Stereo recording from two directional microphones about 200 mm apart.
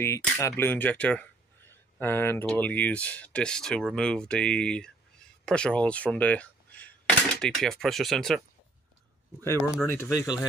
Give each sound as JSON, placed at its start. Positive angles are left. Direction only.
{"t": 0.0, "sound": "speech", "side_deg": 15}
{"t": 9.8, "sound": "speech", "side_deg": 15}